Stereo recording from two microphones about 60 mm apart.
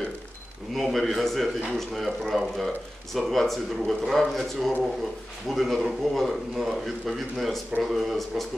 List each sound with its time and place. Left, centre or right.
0.7 s a man's voice: centre